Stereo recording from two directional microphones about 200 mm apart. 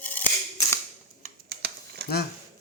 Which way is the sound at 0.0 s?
10° left (ahead or behind).